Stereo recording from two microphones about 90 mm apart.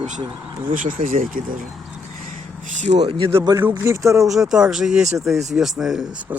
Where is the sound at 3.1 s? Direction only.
85° right.